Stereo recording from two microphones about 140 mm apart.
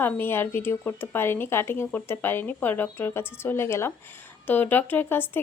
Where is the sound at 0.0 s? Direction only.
15° left (ahead or behind).